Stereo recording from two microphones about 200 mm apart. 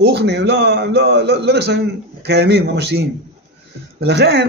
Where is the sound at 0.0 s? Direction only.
55° right (ahead or behind).